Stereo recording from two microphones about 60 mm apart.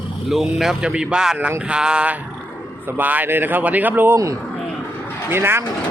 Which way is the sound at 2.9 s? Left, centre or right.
Right.